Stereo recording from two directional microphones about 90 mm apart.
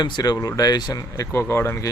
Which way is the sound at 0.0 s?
50° left (ahead or behind).